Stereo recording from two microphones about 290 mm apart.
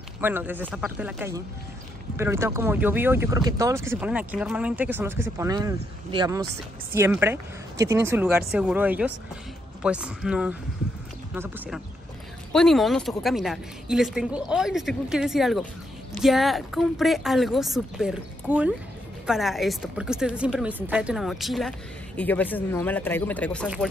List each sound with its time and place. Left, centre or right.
0.2 s speech: centre